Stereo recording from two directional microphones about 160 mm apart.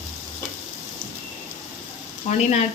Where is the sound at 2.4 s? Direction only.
45° left (ahead or behind).